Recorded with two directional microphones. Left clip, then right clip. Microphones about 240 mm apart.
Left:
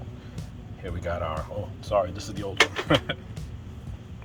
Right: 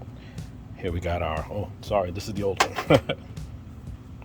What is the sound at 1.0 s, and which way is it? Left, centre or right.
Speech, right.